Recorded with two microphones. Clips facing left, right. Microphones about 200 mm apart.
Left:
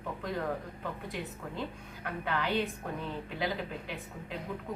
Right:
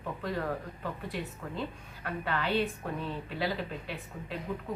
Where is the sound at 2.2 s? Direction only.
15° left (ahead or behind).